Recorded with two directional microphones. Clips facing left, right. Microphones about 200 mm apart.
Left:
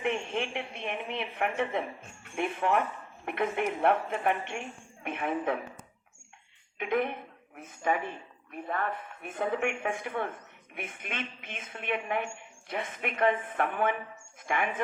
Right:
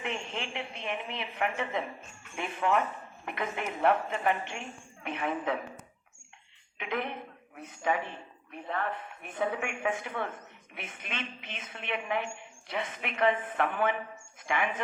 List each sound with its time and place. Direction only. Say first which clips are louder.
0.0 s a woman's voice: left 5 dB; 55° left (ahead or behind)
6.7 s a woman's voice: left 5 dB; 50° left (ahead or behind)